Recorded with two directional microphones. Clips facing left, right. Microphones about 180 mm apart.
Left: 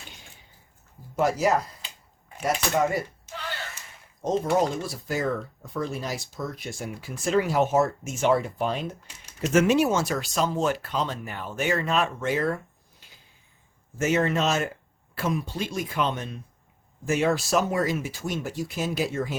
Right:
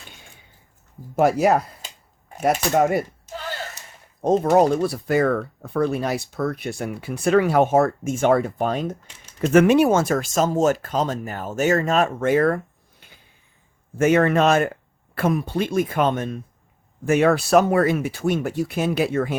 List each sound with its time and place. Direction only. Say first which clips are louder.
1.2 s speech: right 5 dB; 60° right (ahead or behind)
2.4 s a sound: right 6 dB; 50° right (ahead or behind)
4.6 s speech: right 8 dB; 60° right (ahead or behind)
9.5 s speech: right 6 dB; 60° right (ahead or behind)
17.1 s speech: right 7 dB; 60° right (ahead or behind)